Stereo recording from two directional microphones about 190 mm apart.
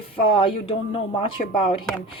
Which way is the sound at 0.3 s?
25° left (ahead or behind).